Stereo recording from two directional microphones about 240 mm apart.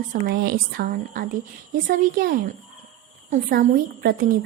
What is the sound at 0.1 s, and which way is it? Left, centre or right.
A woman's voice, right.